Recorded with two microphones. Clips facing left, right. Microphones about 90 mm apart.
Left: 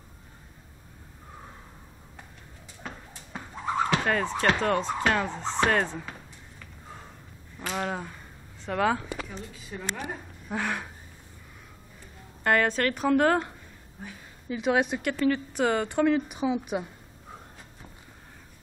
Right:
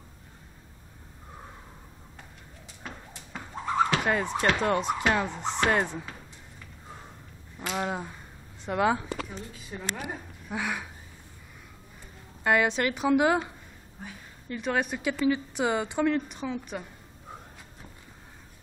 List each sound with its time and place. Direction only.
4.0 s a woman's voice: 15° right (ahead or behind)
7.7 s a woman's voice: 10° right (ahead or behind)
12.4 s a woman's voice: 5° right (ahead or behind)
14.5 s a woman's voice: 5° left (ahead or behind)
15.0 s a woman's voice: 10° right (ahead or behind)
16.0 s a woman's voice: 5° left (ahead or behind)